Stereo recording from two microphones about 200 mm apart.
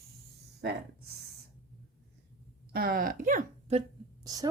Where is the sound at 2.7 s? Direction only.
45° right (ahead or behind).